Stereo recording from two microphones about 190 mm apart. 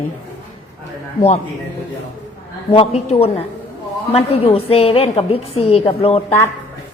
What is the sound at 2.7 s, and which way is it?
A woman's voice, 30° left (ahead or behind).